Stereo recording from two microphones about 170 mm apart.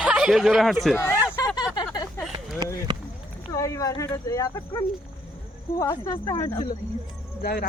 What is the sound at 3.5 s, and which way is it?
Speech, 20° left (ahead or behind).